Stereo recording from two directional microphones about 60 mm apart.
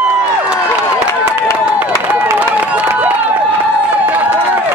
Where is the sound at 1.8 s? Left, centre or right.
Right.